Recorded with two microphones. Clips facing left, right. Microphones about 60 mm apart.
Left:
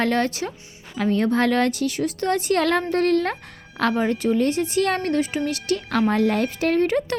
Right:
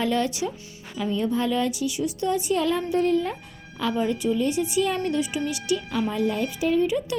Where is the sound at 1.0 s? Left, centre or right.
Left.